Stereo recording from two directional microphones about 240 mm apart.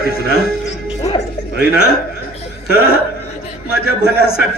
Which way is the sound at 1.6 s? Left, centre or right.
Left.